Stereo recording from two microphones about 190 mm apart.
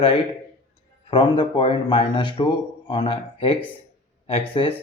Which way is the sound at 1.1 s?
25° left (ahead or behind).